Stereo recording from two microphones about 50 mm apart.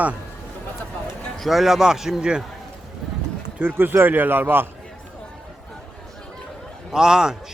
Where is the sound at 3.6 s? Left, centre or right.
Right.